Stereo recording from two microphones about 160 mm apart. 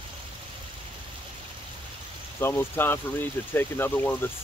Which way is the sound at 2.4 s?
15° left (ahead or behind).